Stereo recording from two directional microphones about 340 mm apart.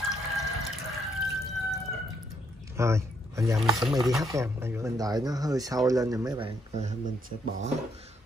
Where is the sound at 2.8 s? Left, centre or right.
Centre.